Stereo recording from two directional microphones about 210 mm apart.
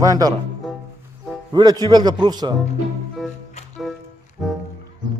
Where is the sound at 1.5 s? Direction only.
20° right (ahead or behind).